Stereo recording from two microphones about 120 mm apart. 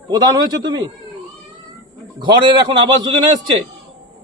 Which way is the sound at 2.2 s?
40° right (ahead or behind).